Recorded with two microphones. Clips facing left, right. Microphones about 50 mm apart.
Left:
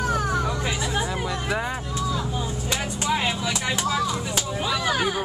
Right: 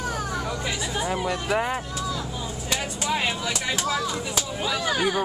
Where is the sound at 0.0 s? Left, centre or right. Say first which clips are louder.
Left 5 dB; left.